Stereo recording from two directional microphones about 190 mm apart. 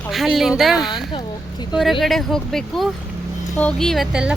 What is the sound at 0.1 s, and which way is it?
Speech, centre (ahead or behind).